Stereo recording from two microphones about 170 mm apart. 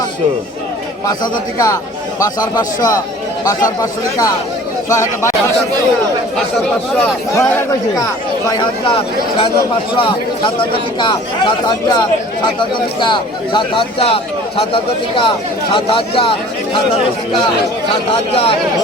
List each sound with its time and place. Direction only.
1.0 s speech: 20° left (ahead or behind)
8.4 s speech: 25° left (ahead or behind)
11.0 s speech: 30° left (ahead or behind)
13.0 s a man's voice: 30° left (ahead or behind)
18.1 s a man's voice: 35° left (ahead or behind)